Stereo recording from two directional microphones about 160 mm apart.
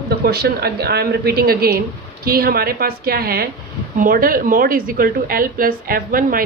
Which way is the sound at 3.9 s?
60° right (ahead or behind).